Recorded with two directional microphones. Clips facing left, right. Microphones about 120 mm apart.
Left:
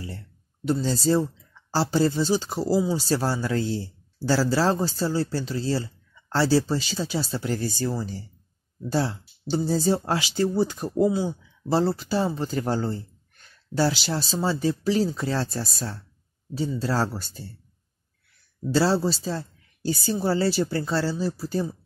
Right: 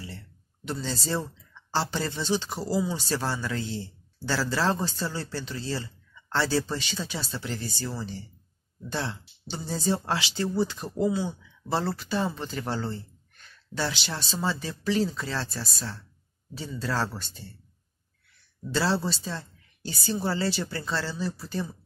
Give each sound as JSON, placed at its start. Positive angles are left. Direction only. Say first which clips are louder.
{"t": 0.7, "sound": "speech", "louder": "left 9 dB", "side_deg": 40}
{"t": 18.7, "sound": "speech", "louder": "left 5 dB", "side_deg": 40}